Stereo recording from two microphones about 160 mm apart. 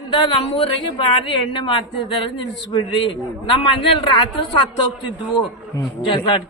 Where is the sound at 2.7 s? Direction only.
30° left (ahead or behind).